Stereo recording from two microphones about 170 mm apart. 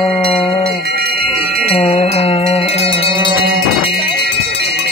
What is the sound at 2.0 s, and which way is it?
Mantra, 35° left (ahead or behind).